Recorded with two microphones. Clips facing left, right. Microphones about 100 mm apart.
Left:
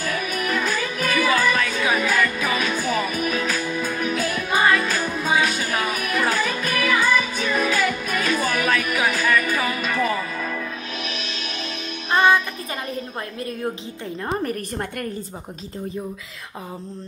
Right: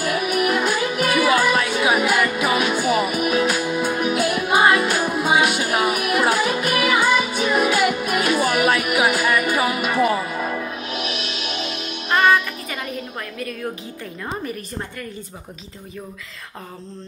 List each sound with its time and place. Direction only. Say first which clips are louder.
0.0 s music: right 5 dB; 15° right (ahead or behind)
12.9 s a woman's voice: even; 30° left (ahead or behind)
14.4 s a woman's voice: left 3 dB; 50° left (ahead or behind)